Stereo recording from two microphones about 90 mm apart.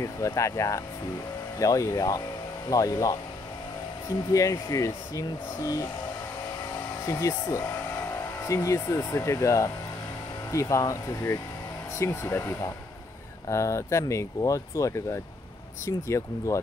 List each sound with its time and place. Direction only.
0.0 s speech: 35° left (ahead or behind)
4.3 s speech: 35° left (ahead or behind)
7.1 s speech: 40° left (ahead or behind)